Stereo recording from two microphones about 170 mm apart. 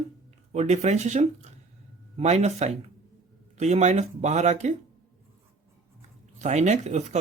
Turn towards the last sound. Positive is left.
turn(degrees=-40)  # may be behind; listen again after turning